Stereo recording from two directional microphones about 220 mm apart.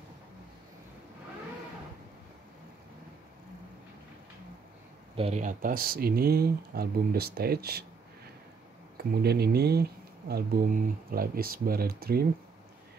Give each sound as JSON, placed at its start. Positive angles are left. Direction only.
{"t": 5.1, "sound": "speech", "side_deg": -30}
{"t": 8.9, "sound": "speech", "side_deg": -45}